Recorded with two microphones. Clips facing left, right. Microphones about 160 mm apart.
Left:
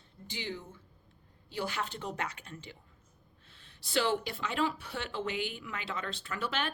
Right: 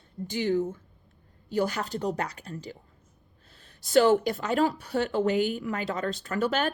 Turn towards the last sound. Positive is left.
turn(degrees=-45)  # may be behind; listen again after turning